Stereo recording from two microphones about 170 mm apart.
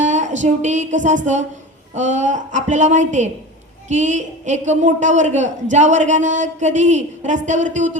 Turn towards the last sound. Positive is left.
turn(degrees=-45)  # may be behind; listen again after turning